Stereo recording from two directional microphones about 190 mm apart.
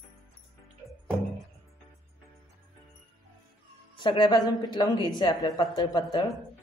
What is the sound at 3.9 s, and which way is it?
Speech, 25° left (ahead or behind).